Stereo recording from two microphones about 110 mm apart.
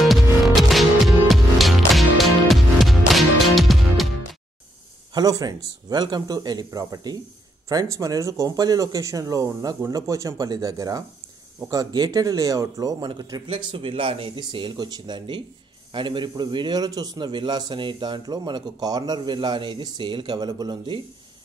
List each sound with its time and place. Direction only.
0.0 s music: centre (ahead or behind)
5.1 s speech: 35° right (ahead or behind)
13.5 s a man's voice: 50° right (ahead or behind)